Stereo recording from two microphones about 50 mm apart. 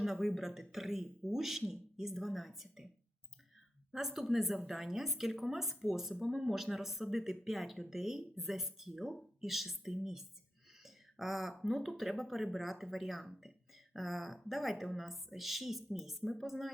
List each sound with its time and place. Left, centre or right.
0.0 s a woman's voice: centre
3.9 s a woman's voice: centre